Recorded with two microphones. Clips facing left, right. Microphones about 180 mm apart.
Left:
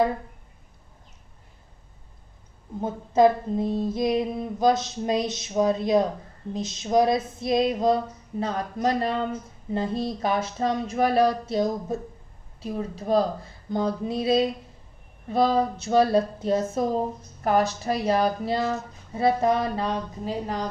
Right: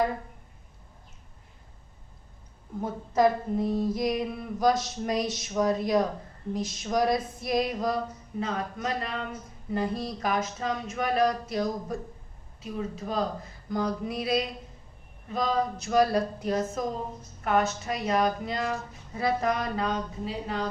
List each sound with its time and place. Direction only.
3.2 s female singing: 25° left (ahead or behind)
9.6 s female singing: 25° left (ahead or behind)
17.4 s speech: 35° left (ahead or behind)